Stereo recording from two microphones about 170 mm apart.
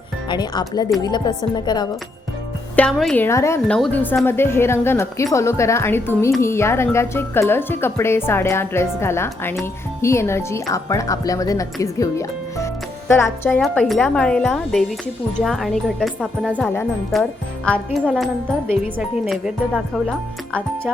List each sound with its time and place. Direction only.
0.3 s speech: 25° left (ahead or behind)
2.9 s a woman's voice: centre (ahead or behind)
3.2 s speech: 15° left (ahead or behind)
13.6 s a woman's voice: centre (ahead or behind)
18.0 s a woman's voice: 5° right (ahead or behind)